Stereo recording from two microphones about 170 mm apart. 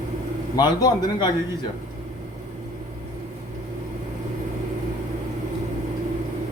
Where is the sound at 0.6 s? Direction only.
25° left (ahead or behind).